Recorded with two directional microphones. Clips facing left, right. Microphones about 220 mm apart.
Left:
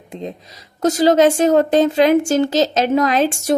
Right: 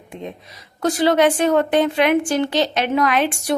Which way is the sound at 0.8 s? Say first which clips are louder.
Left 3 dB; 40° left (ahead or behind).